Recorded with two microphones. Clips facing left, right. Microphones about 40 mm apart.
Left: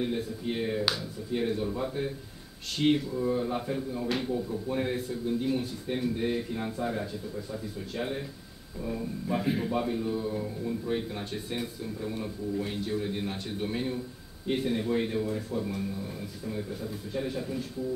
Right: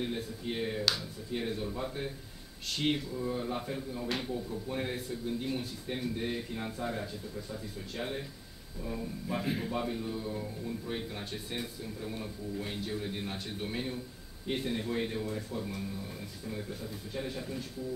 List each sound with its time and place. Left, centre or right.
0.0 s a man's voice: centre